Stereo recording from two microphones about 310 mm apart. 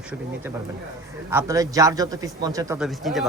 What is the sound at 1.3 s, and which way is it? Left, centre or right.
Speech, centre.